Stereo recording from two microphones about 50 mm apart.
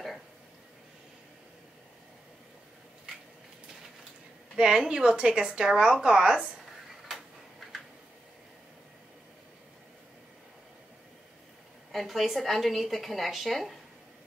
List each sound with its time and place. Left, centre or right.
4.6 s a woman's voice: centre
11.9 s a woman's voice: centre